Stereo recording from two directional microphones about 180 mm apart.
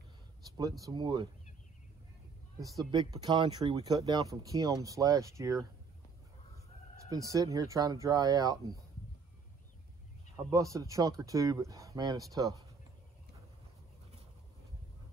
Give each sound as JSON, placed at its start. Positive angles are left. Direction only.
{"t": 0.6, "sound": "speech", "side_deg": -20}
{"t": 2.8, "sound": "speech", "side_deg": -20}
{"t": 7.1, "sound": "speech", "side_deg": -20}
{"t": 10.5, "sound": "speech", "side_deg": -20}